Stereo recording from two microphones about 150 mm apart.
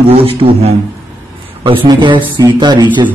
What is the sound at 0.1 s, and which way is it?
A man's voice, 40° right (ahead or behind).